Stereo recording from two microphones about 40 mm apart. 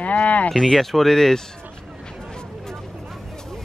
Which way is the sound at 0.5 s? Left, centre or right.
Centre.